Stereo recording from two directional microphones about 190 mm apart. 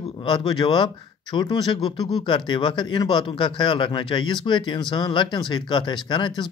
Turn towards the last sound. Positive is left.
turn(degrees=25)  # may be behind; listen again after turning